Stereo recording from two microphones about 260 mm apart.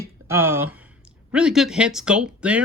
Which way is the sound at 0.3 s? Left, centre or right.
Centre.